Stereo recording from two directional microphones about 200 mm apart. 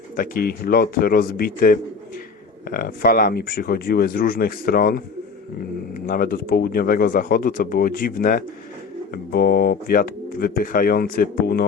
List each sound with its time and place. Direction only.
0.2 s speech: 50° left (ahead or behind)